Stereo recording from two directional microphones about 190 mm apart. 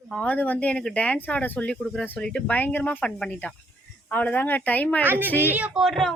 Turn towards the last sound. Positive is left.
turn(degrees=0)  # may be behind; listen again after turning